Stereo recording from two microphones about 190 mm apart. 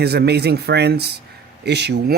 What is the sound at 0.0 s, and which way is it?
Speech, 60° right (ahead or behind).